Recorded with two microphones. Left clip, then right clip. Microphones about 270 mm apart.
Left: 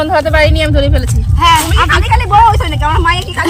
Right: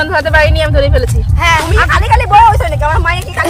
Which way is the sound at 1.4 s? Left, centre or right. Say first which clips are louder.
Left 2 dB; centre.